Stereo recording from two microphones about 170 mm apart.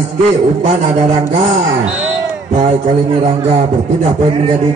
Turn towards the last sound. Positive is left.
turn(degrees=-40)  # may be behind; listen again after turning